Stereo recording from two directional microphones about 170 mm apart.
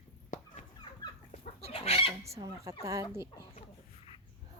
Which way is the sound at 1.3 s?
35° left (ahead or behind).